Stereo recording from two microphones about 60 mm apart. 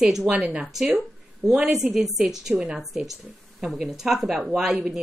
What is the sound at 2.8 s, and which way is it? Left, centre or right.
A woman's voice, centre.